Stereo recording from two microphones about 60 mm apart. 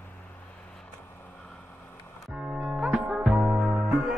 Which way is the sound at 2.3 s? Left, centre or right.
Centre.